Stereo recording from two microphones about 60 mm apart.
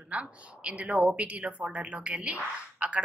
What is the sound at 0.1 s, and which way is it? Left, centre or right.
A woman's voice, right.